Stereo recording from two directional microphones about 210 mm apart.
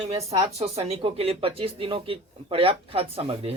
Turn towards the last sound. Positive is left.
turn(degrees=-30)  # may be behind; listen again after turning